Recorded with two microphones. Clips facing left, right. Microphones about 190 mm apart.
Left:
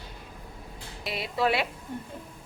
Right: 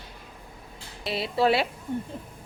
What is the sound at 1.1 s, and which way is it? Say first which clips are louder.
Speech: right 4 dB; 30° right (ahead or behind).